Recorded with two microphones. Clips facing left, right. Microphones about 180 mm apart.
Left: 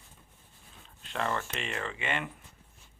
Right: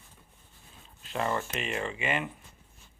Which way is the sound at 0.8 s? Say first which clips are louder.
Right 2 dB; 5° right (ahead or behind).